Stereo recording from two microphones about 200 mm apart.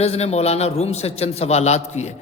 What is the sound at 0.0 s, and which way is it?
A man's voice, 30° left (ahead or behind).